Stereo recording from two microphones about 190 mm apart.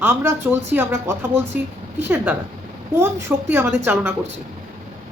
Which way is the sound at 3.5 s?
10° right (ahead or behind).